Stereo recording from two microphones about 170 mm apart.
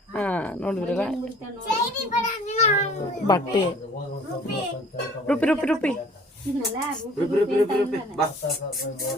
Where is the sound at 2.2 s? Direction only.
40° left (ahead or behind).